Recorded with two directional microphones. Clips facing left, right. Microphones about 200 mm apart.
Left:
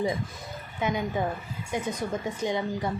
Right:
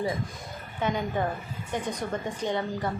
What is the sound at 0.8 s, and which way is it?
A woman's voice, 10° left (ahead or behind).